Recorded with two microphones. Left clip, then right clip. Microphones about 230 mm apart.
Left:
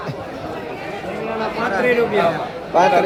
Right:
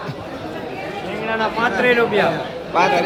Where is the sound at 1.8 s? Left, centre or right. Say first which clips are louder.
Right 1 dB; centre.